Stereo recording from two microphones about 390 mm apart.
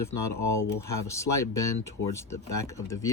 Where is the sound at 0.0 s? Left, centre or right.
Left.